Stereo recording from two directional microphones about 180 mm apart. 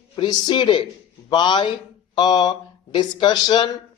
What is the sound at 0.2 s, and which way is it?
Speech, 25° left (ahead or behind).